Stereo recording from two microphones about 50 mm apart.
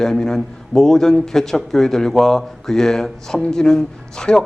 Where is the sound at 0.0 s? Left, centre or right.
Centre.